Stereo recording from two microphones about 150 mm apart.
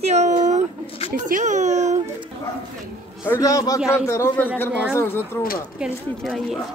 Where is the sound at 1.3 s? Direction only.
55° right (ahead or behind).